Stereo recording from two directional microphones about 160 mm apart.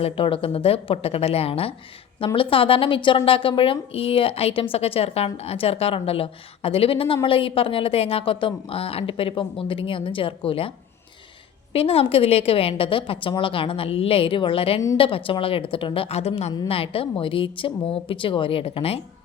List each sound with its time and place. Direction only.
0.0 s speech: 35° left (ahead or behind)
11.7 s speech: 35° left (ahead or behind)